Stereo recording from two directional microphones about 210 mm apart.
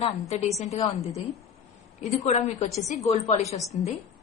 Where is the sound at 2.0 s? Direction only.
30° left (ahead or behind).